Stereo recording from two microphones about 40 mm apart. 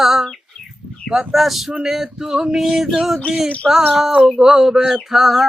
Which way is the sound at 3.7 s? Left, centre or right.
Centre.